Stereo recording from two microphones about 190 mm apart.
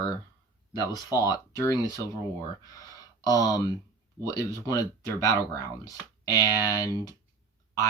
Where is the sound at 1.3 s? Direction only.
20° left (ahead or behind).